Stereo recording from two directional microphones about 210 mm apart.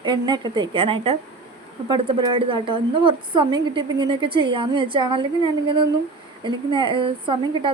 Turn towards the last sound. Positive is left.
turn(degrees=-25)  # may be behind; listen again after turning